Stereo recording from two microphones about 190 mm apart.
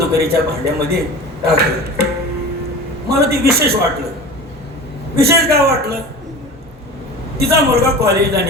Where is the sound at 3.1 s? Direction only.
55° right (ahead or behind).